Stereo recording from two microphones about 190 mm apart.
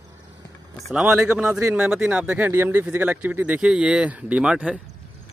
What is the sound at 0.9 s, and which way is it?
Speech, 5° right (ahead or behind).